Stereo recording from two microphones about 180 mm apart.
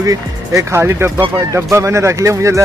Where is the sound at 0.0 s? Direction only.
20° right (ahead or behind).